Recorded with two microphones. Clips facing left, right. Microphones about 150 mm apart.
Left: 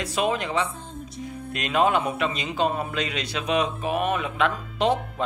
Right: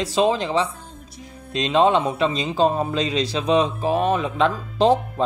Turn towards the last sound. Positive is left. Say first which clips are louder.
# right 6 dB
turn(degrees=-30)  # may be behind; listen again after turning